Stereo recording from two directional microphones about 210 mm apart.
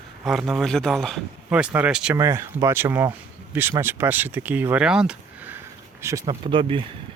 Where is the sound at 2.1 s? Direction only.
15° right (ahead or behind).